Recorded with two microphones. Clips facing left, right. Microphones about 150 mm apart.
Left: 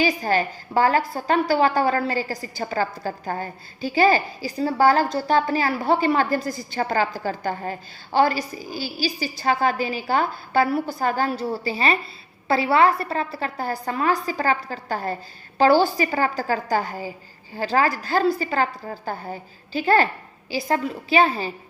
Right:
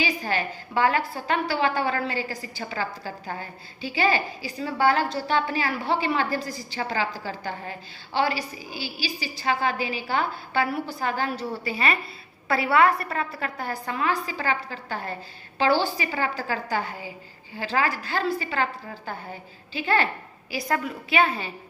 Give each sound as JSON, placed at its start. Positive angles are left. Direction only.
{"t": 0.0, "sound": "a woman's voice", "side_deg": 40}
{"t": 20.5, "sound": "a woman's voice", "side_deg": 25}